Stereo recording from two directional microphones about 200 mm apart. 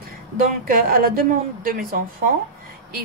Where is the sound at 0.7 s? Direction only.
45° right (ahead or behind).